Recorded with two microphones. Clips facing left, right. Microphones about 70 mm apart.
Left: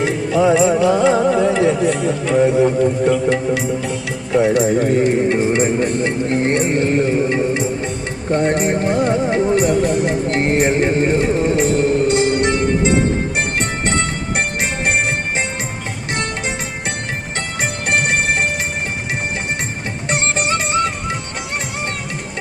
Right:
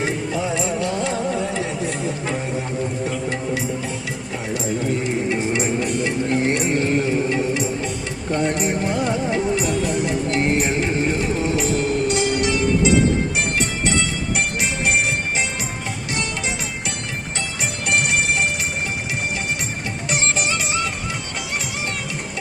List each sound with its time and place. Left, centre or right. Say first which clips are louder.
0.0 s music: left 8 dB; left
1.8 s speech: left 7 dB; left
3.1 s music: left 8 dB; left
4.3 s speech: left 15 dB; left
4.6 s speech: left 8 dB; left
5.4 s speech: left 6 dB; left
8.3 s music: left 5 dB; left
17.6 s music: left 3 dB; left
20.1 s music: left 4 dB; left